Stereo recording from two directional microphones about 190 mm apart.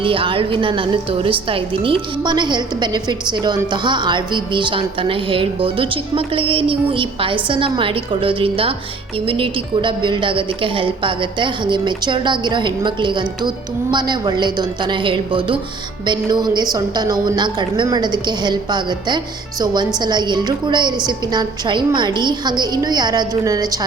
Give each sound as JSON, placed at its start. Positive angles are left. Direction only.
{"t": 0.0, "sound": "a woman's voice", "side_deg": -25}